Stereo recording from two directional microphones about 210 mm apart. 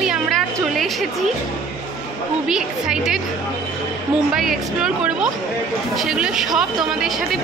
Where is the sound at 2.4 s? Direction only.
Centre (ahead or behind).